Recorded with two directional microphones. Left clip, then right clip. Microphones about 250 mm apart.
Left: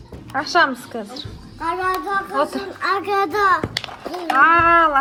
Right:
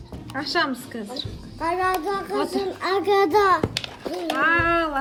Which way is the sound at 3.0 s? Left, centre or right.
Centre.